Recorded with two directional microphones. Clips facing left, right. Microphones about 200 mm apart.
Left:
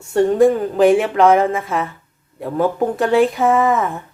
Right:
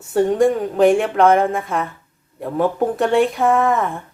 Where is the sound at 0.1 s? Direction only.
Centre (ahead or behind).